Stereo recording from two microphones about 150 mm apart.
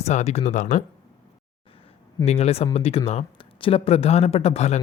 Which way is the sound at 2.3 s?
40° left (ahead or behind).